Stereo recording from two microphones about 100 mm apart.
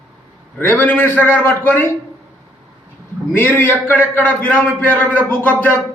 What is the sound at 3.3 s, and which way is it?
A man's voice, 20° left (ahead or behind).